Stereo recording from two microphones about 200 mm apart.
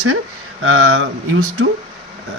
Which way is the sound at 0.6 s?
90° right.